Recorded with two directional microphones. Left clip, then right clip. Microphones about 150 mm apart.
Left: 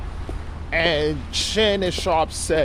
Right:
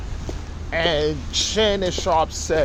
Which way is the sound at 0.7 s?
30° left (ahead or behind).